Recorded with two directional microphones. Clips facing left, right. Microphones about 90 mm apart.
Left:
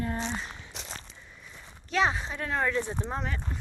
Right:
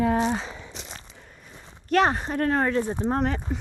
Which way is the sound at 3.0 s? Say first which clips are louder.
Right 10 dB; 55° right (ahead or behind).